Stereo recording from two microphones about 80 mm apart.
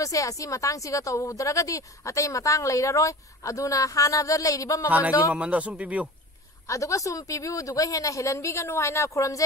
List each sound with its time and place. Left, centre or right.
0.0 s speech: left
4.8 s a man's voice: centre
6.7 s speech: left